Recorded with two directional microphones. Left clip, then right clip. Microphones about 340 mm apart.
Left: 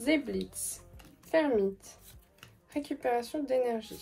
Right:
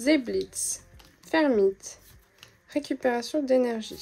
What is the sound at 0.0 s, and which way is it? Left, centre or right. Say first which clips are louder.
A woman's voice: right 6 dB; right.